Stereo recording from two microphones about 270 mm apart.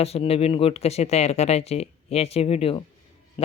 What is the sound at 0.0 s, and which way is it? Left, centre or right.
Speech, left.